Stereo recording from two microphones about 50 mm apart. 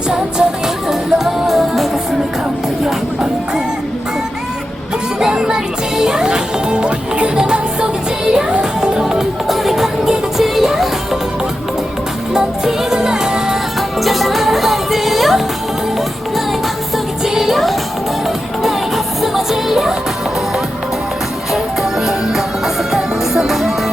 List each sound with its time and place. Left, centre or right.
0.9 s music: centre
5.2 s music: centre
12.3 s music: centre
14.0 s music: centre
17.2 s music: centre
19.2 s music: centre
22.0 s music: centre